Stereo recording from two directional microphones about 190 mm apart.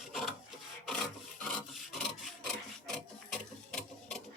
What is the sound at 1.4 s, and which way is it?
Filing, centre (ahead or behind).